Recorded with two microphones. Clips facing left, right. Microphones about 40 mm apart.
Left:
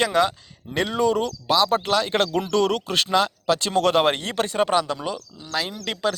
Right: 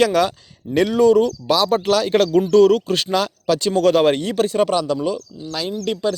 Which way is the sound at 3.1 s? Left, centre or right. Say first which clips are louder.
Right 1 dB; left.